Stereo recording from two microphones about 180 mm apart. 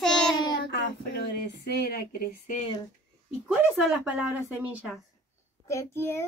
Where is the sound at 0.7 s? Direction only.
75° left (ahead or behind); by 2.0 s 60° left (ahead or behind).